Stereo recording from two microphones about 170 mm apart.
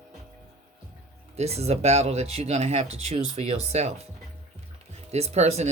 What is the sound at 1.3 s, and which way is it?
Speech, 40° right (ahead or behind).